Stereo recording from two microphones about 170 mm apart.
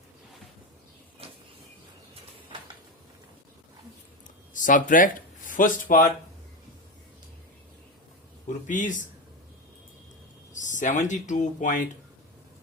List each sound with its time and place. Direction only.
4.5 s speech: 50° left (ahead or behind)
8.4 s a man's voice: 50° left (ahead or behind)
10.5 s speech: 45° left (ahead or behind)